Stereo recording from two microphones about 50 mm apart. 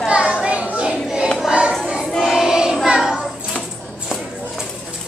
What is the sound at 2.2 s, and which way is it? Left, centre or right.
Child singing, centre.